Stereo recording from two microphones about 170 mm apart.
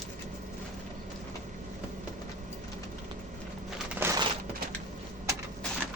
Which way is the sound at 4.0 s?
15° right (ahead or behind).